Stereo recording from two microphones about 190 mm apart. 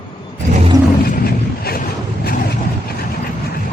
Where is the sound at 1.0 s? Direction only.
50° left (ahead or behind).